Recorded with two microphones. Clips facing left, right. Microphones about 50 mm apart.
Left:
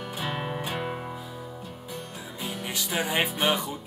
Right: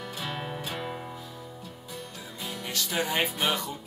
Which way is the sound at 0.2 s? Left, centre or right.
Centre.